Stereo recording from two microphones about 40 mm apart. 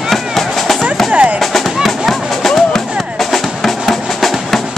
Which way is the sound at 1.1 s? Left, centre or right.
Right.